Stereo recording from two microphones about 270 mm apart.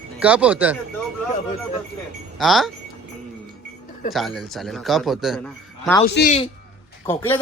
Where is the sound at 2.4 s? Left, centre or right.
Centre.